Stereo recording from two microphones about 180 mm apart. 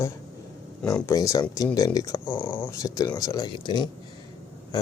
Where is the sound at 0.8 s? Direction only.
15° left (ahead or behind).